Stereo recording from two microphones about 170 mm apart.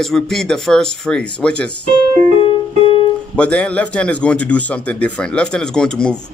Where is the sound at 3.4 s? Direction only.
5° left (ahead or behind).